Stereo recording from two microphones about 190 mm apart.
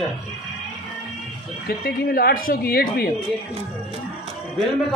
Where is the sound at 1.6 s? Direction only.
55° left (ahead or behind).